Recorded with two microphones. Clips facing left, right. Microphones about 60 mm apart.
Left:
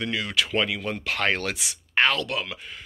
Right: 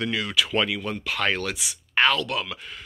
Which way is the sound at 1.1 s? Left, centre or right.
Left.